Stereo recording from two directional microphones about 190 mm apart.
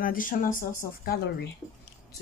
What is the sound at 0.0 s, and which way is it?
Speech, 50° left (ahead or behind).